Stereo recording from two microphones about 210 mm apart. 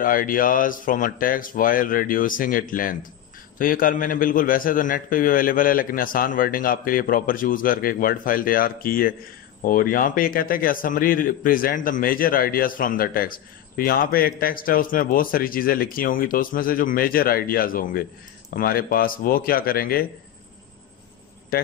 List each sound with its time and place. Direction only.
0.0 s a man's voice: 40° left (ahead or behind)